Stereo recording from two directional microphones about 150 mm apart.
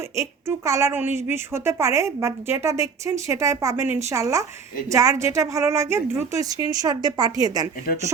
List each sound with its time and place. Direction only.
0.2 s a woman's voice: 20° right (ahead or behind)